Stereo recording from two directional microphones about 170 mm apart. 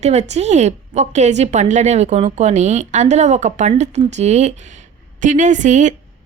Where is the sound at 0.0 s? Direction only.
40° right (ahead or behind).